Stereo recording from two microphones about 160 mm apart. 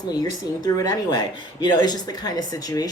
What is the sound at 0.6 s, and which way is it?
Speech, 25° left (ahead or behind).